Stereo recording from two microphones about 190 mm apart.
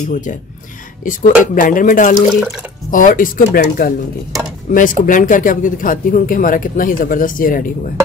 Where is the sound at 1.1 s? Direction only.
45° left (ahead or behind).